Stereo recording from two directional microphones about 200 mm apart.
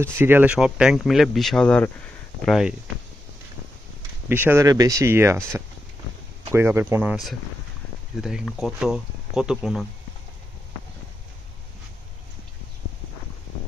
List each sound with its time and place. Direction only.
0.0 s speech: 10° right (ahead or behind)
4.3 s speech: 10° right (ahead or behind)
6.5 s speech: 10° right (ahead or behind)
8.2 s speech: 5° right (ahead or behind)